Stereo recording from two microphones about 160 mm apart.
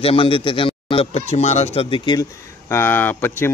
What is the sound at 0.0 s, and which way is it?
A man's voice, 35° left (ahead or behind).